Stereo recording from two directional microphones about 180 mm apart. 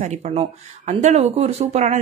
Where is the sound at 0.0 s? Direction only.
40° right (ahead or behind).